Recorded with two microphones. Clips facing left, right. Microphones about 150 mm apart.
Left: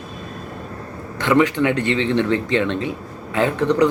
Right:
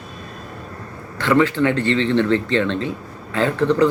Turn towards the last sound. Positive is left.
turn(degrees=15)  # may be behind; listen again after turning